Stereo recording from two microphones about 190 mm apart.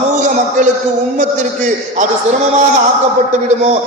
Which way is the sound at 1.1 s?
40° right (ahead or behind).